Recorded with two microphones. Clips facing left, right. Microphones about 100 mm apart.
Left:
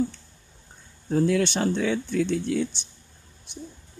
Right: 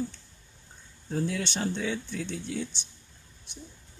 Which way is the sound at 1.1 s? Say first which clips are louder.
Left 9 dB; 75° left (ahead or behind).